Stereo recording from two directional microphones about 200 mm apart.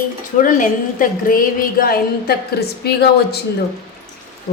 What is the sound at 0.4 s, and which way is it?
A woman's voice, 40° left (ahead or behind).